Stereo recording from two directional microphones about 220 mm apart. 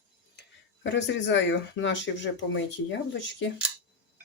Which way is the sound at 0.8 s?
55° left (ahead or behind).